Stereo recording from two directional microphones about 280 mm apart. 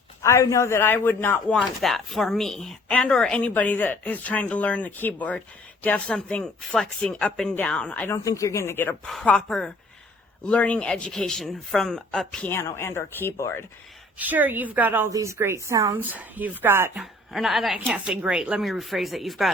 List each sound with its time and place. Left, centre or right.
0.2 s a man's voice: centre
14.2 s a woman's voice: centre